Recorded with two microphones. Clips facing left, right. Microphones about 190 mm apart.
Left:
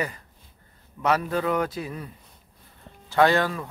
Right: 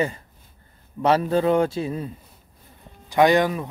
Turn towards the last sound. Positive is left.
turn(degrees=-15)  # may be behind; listen again after turning